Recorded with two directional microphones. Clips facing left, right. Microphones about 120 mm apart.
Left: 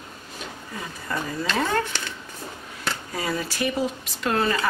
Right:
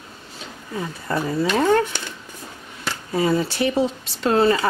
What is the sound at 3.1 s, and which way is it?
Speech, 25° right (ahead or behind).